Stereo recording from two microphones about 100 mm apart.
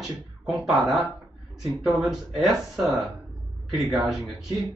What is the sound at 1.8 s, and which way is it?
Speech, centre (ahead or behind).